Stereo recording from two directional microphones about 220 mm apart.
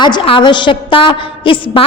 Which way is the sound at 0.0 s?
20° left (ahead or behind).